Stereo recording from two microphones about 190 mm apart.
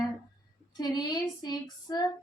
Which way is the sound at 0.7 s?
20° left (ahead or behind).